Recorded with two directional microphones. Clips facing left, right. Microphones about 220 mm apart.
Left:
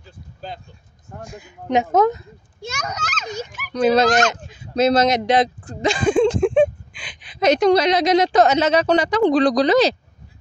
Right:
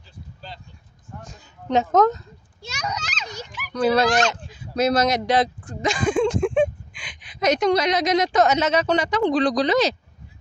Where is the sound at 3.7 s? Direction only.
20° left (ahead or behind).